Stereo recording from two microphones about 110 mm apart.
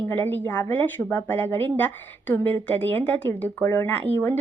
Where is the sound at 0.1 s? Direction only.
15° left (ahead or behind).